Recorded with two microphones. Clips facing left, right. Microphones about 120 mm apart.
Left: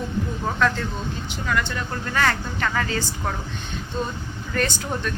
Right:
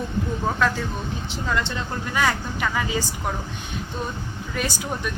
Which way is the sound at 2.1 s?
10° right (ahead or behind).